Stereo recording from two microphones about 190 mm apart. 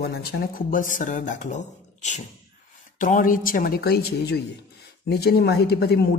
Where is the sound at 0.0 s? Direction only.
55° left (ahead or behind).